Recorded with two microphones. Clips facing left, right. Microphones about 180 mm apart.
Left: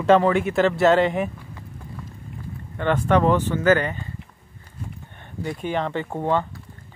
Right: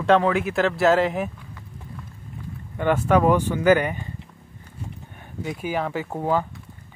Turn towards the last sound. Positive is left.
turn(degrees=-5)  # may be behind; listen again after turning